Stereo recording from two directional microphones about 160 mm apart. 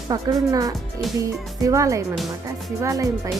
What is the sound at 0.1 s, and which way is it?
Speech, 20° right (ahead or behind).